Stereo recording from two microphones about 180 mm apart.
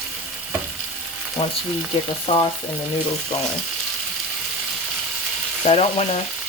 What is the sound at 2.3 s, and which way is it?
Frying, 35° left (ahead or behind).